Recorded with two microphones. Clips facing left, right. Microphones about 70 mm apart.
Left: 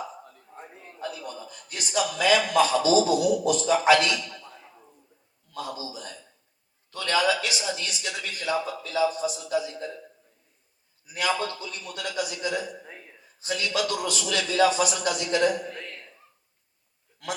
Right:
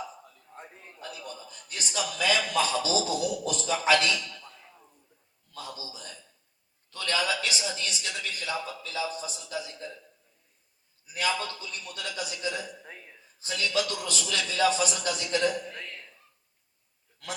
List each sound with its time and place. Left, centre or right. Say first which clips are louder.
1.2 s a man's voice: left 4 dB; left
5.5 s a man's voice: left 6 dB; left
6.9 s a man's voice: left 5 dB; left
9.0 s a man's voice: left 9 dB; centre
11.3 s a man's voice: left 4 dB; left